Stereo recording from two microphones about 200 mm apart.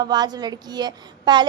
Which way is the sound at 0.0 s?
20° right (ahead or behind).